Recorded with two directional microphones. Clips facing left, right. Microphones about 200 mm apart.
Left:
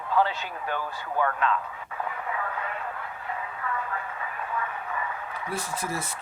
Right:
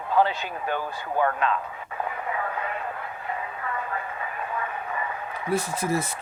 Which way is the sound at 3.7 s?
20° right (ahead or behind).